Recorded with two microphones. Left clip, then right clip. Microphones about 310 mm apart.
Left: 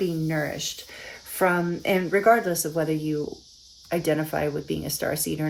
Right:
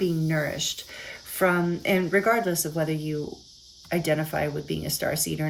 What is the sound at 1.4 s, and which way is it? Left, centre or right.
Speech, centre.